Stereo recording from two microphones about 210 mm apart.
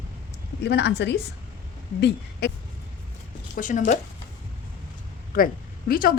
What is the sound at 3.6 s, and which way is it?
Speech, 40° left (ahead or behind).